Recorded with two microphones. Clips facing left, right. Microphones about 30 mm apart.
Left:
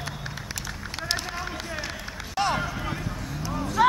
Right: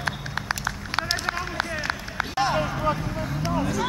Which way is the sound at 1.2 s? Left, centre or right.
Right.